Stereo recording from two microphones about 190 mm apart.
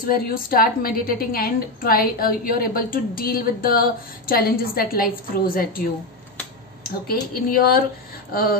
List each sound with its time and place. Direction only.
0.0 s a woman's voice: 50° left (ahead or behind)